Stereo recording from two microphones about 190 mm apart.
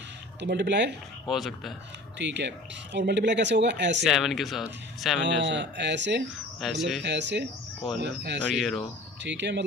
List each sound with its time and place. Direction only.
0.3 s speech: 65° right (ahead or behind)
1.3 s speech: centre (ahead or behind)
2.1 s speech: 65° right (ahead or behind)
4.0 s speech: centre (ahead or behind)
5.2 s speech: 70° right (ahead or behind)
6.6 s speech: centre (ahead or behind)
7.0 s speech: 65° right (ahead or behind)
8.5 s speech: centre (ahead or behind)
9.2 s speech: 70° right (ahead or behind)